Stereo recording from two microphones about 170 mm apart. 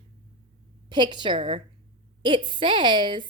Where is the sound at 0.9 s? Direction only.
25° right (ahead or behind).